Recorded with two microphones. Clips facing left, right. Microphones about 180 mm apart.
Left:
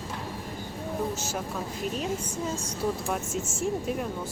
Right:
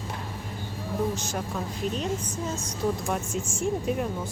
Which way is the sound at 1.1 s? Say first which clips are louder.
Right 1 dB; 5° left (ahead or behind).